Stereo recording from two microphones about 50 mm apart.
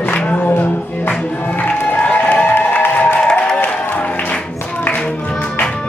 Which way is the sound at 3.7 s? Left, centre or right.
Left.